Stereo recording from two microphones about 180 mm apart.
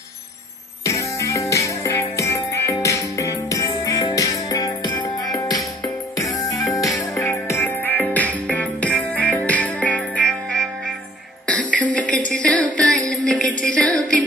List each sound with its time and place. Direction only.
0.8 s music: 15° left (ahead or behind)
11.4 s a sound: 5° left (ahead or behind)
13.7 s music: 5° left (ahead or behind)